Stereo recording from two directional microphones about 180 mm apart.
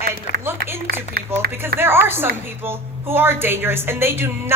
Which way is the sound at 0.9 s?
60° right (ahead or behind).